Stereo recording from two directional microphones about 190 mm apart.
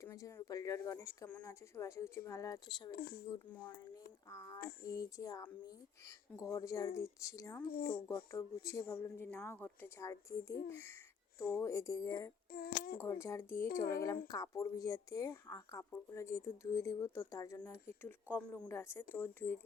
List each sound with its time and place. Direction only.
0.0 s speech: 15° left (ahead or behind)
2.9 s speech: 55° left (ahead or behind)
4.3 s speech: 15° left (ahead or behind)
7.7 s speech: 50° left (ahead or behind)
7.9 s speech: 15° left (ahead or behind)
12.5 s speech: 55° left (ahead or behind)
13.0 s speech: 15° left (ahead or behind)